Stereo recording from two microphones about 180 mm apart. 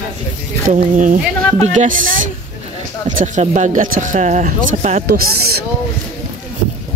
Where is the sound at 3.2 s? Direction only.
40° right (ahead or behind).